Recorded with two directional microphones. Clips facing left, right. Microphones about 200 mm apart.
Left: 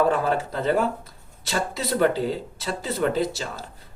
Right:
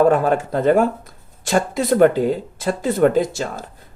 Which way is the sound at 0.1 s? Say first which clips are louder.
Right 6 dB; 50° right (ahead or behind).